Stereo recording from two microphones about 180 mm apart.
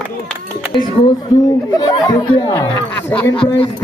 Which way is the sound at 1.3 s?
20° left (ahead or behind).